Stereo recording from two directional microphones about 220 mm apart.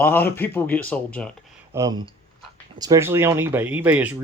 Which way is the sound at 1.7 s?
15° right (ahead or behind).